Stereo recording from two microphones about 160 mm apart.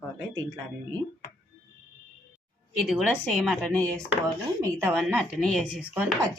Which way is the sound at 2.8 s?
Centre (ahead or behind).